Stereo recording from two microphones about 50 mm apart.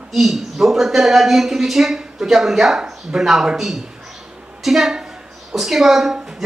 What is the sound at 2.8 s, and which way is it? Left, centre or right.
A woman's voice, centre.